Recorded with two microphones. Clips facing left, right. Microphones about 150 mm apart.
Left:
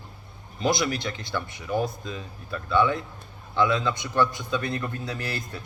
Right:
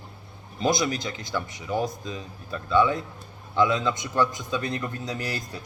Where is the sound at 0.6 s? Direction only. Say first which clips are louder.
Even; 20° right (ahead or behind).